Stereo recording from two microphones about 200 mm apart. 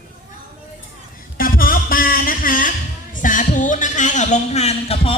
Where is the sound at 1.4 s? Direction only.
45° left (ahead or behind).